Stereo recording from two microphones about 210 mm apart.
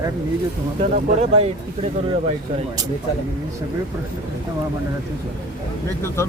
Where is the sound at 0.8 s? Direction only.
30° right (ahead or behind).